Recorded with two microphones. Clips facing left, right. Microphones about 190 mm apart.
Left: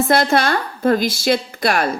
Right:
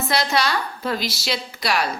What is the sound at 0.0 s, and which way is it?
A woman's voice, 50° left (ahead or behind).